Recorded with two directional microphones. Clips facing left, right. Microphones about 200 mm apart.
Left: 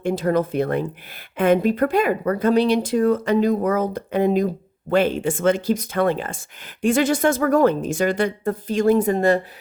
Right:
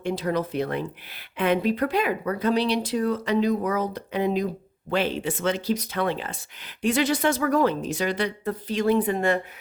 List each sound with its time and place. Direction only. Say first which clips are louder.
0.0 s speech: left 5 dB; 50° left (ahead or behind)